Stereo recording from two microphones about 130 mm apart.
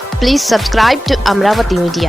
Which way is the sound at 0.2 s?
Centre (ahead or behind).